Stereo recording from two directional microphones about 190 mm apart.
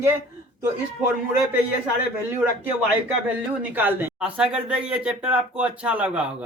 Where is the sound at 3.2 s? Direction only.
10° right (ahead or behind).